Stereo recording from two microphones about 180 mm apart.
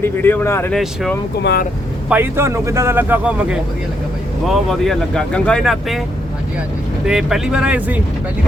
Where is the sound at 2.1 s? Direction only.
10° right (ahead or behind).